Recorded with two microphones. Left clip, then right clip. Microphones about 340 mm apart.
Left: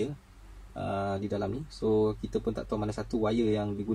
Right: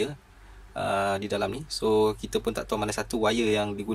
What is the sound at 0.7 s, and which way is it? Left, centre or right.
Speech, right.